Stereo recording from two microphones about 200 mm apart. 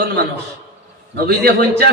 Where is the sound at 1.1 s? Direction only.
50° right (ahead or behind).